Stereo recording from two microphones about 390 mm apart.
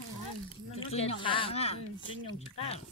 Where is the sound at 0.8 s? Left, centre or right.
Centre.